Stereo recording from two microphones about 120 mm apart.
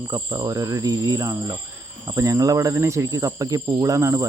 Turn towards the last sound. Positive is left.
turn(degrees=-25)  # may be behind; listen again after turning